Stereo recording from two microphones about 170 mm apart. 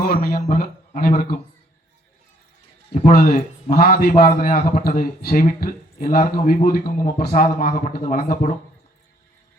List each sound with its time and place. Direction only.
0.0 s a man's voice: 60° left (ahead or behind)
3.1 s a man's voice: 55° left (ahead or behind)